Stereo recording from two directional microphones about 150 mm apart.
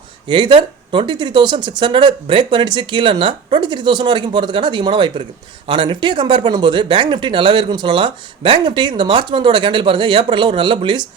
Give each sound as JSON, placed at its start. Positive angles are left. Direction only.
{"t": 0.3, "sound": "speech", "side_deg": -35}